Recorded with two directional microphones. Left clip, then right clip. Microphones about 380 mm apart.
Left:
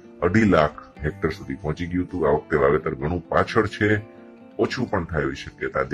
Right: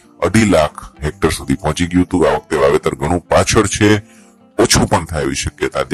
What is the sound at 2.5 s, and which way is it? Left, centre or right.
Speech, centre.